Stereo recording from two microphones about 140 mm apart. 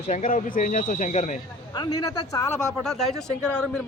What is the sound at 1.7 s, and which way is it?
Speech, 30° left (ahead or behind).